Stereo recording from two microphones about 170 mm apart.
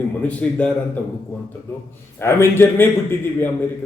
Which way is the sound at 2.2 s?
15° left (ahead or behind).